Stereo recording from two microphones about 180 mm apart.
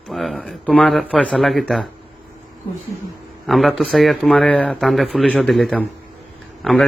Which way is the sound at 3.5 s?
Centre (ahead or behind).